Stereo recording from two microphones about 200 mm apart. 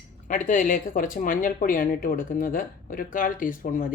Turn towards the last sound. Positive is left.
turn(degrees=45)  # may be behind; listen again after turning